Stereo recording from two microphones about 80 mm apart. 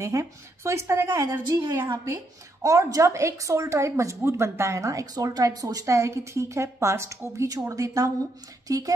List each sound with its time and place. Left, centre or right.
0.0 s a woman's voice: right